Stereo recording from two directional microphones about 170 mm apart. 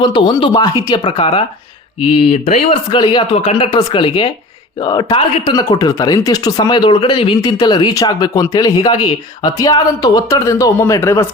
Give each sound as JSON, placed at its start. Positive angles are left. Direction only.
{"t": 0.0, "sound": "speech", "side_deg": 25}